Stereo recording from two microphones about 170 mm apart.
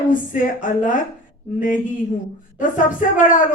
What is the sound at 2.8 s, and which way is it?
Speech, 50° left (ahead or behind).